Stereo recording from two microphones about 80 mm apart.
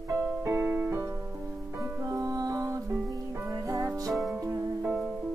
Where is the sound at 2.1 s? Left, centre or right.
Right.